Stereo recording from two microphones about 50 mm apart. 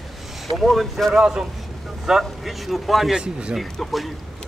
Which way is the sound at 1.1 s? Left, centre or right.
Centre.